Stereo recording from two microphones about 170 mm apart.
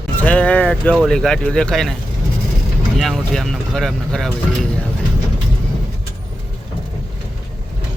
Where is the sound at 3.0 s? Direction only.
Centre (ahead or behind).